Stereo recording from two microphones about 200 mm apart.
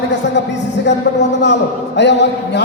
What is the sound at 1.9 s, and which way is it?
Speech, 60° left (ahead or behind).